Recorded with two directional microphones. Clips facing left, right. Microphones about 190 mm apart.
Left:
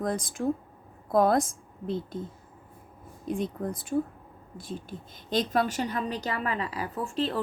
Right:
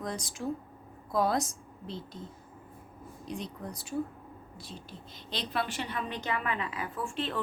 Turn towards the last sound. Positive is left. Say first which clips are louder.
# left 5 dB
turn(degrees=35)  # may be behind; listen again after turning